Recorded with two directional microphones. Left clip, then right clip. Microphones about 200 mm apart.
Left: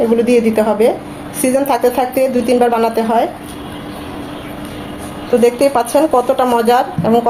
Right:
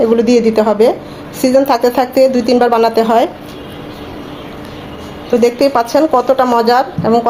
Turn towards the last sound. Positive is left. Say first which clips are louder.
# right 1 dB
turn(degrees=-20)  # may be behind; listen again after turning